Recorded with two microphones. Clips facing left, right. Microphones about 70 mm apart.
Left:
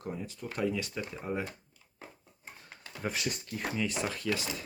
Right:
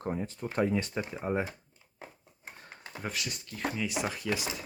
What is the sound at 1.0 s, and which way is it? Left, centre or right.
Speech, right.